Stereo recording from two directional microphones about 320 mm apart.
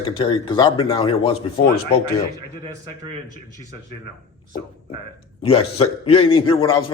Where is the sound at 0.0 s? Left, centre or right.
Centre.